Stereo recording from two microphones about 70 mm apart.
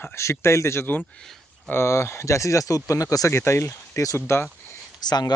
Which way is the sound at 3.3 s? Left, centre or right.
Left.